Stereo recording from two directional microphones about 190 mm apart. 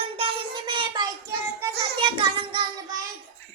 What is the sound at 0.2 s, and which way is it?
Child singing, 25° right (ahead or behind).